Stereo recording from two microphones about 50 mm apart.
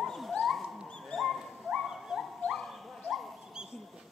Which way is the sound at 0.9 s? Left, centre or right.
Centre.